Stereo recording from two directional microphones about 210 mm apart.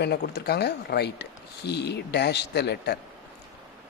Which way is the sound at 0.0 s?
50° left (ahead or behind).